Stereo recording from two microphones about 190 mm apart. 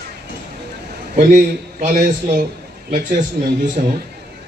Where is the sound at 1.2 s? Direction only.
45° right (ahead or behind).